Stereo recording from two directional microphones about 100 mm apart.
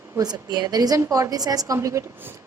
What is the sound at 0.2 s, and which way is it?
A woman's voice, 40° right (ahead or behind).